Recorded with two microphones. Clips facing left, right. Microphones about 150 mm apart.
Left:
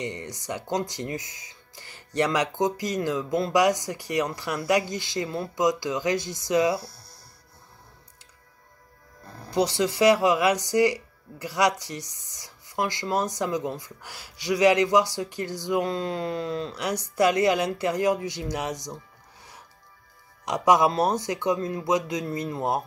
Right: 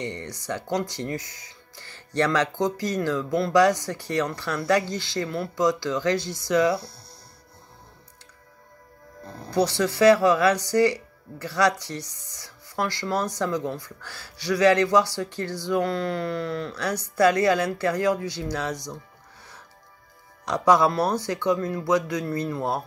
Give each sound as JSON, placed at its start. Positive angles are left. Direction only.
{"t": 0.0, "sound": "speech", "side_deg": 15}
{"t": 9.5, "sound": "speech", "side_deg": 20}
{"t": 20.4, "sound": "speech", "side_deg": 15}